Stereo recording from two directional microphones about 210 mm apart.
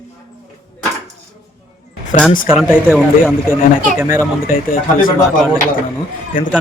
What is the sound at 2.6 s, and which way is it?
Speech, 10° left (ahead or behind).